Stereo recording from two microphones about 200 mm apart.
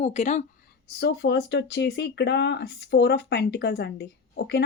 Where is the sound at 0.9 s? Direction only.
50° left (ahead or behind).